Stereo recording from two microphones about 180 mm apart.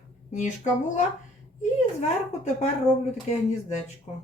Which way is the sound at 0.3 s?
40° left (ahead or behind).